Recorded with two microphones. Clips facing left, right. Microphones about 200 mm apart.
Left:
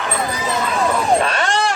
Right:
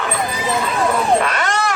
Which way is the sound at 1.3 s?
30° left (ahead or behind).